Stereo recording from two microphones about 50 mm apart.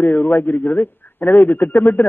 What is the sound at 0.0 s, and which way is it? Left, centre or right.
A man's voice, left.